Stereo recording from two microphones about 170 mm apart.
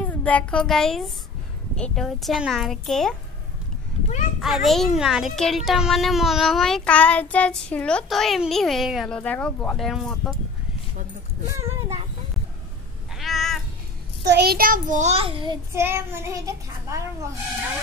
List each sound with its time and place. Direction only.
0.0 s a child's voice: 10° left (ahead or behind)
4.4 s speech: centre (ahead or behind)
13.2 s cat: centre (ahead or behind)
14.3 s child singing: 70° right (ahead or behind); by 15.5 s 35° right (ahead or behind)
15.7 s child singing: 15° right (ahead or behind)